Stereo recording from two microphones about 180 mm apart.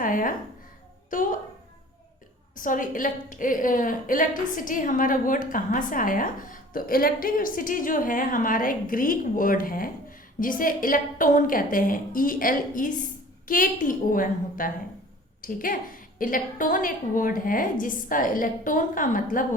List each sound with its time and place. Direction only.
0.0 s a woman's voice: 50° left (ahead or behind)
2.6 s a woman's voice: 50° left (ahead or behind)